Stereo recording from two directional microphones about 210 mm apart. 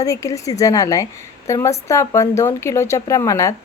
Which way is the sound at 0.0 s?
15° left (ahead or behind).